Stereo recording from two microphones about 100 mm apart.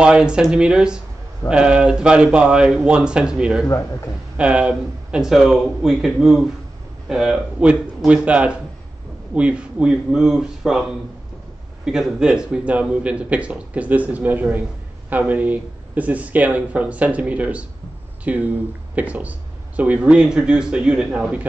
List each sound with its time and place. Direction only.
0.0 s a man's voice: 10° right (ahead or behind)
3.6 s speech: 30° left (ahead or behind)
4.4 s a man's voice: 10° right (ahead or behind)